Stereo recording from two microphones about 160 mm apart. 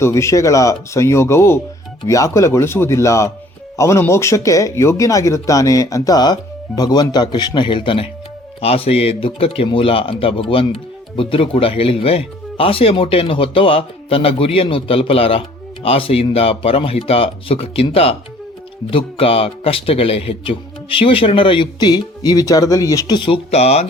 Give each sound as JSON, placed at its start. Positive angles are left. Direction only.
{"t": 0.0, "sound": "speech", "side_deg": 20}